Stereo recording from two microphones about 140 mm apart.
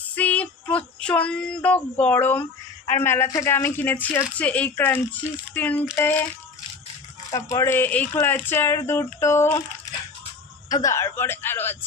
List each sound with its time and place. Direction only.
0.2 s female singing: 10° left (ahead or behind)
2.9 s speech: 15° left (ahead or behind)
7.3 s speech: 25° left (ahead or behind)
10.7 s speech: 25° left (ahead or behind)